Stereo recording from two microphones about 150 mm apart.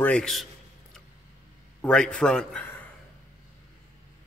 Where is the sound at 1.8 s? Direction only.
5° left (ahead or behind).